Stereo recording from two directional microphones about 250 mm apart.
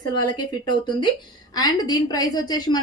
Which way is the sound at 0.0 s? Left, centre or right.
Centre.